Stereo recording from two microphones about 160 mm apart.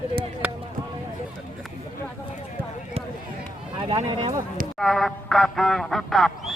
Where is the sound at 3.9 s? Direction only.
35° right (ahead or behind).